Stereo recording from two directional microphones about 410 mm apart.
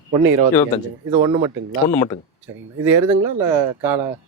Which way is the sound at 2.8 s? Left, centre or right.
Centre.